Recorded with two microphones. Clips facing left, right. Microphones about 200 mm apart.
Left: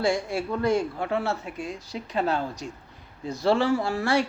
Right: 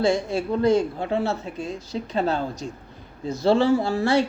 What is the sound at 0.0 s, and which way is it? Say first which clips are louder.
Speech: right 3 dB; 20° right (ahead or behind).